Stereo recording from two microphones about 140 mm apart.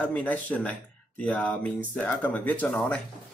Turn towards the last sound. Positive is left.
turn(degrees=5)  # may be behind; listen again after turning